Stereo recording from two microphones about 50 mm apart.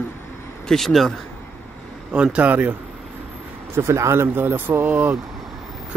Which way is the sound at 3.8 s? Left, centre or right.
Right.